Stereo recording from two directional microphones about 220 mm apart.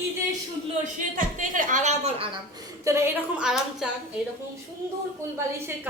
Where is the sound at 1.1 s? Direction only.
35° right (ahead or behind).